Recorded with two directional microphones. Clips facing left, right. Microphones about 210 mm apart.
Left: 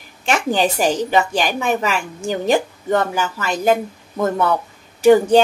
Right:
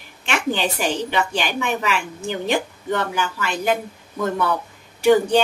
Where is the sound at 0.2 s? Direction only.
40° left (ahead or behind).